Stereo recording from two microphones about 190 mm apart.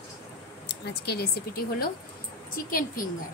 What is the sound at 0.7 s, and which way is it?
Speech, 60° left (ahead or behind).